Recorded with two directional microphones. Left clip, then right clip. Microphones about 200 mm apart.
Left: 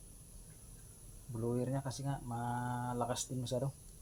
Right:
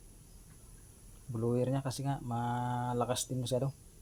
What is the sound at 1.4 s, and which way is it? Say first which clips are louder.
Speech: right 5 dB; 55° right (ahead or behind).